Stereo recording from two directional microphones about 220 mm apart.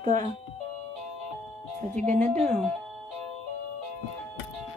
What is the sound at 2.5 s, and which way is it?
Speech, 5° left (ahead or behind).